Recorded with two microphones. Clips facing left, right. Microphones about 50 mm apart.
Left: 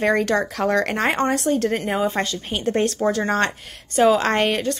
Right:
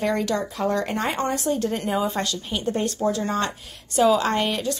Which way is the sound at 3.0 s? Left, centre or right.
Left.